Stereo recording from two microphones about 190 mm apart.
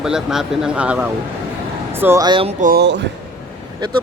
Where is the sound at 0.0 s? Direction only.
5° right (ahead or behind); by 2.8 s 45° right (ahead or behind).